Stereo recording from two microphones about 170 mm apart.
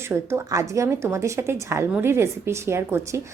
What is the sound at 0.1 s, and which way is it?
A woman's voice, 15° right (ahead or behind).